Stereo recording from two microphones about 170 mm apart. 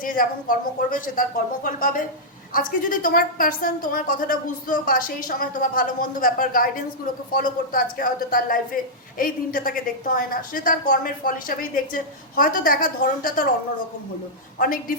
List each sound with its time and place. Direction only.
0.0 s a woman's voice: 55° left (ahead or behind)
14.6 s a woman's voice: 55° left (ahead or behind)